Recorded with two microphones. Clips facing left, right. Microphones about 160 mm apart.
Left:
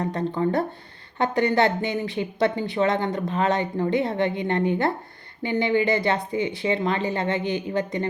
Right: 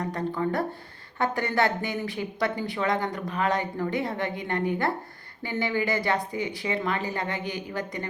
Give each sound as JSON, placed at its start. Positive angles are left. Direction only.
{"t": 0.0, "sound": "speech", "side_deg": 25}